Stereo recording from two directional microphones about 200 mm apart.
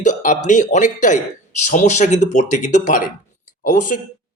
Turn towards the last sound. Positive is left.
turn(degrees=40)  # may be behind; listen again after turning